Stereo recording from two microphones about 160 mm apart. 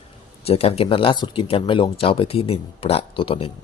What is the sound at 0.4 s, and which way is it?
Speech, 40° left (ahead or behind).